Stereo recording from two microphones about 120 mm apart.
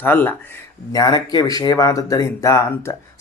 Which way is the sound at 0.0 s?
15° left (ahead or behind).